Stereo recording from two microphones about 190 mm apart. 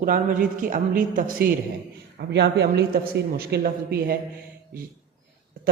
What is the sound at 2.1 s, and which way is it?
A man's voice, 60° right (ahead or behind).